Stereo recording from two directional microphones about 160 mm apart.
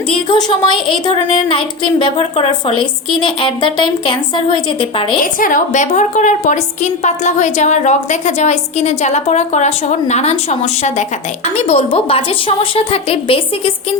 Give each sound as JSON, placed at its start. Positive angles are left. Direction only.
{"t": 0.1, "sound": "speech", "side_deg": 30}
{"t": 5.2, "sound": "a woman's voice", "side_deg": 60}